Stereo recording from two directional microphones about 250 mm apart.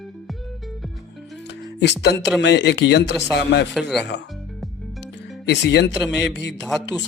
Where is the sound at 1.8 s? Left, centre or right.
Left.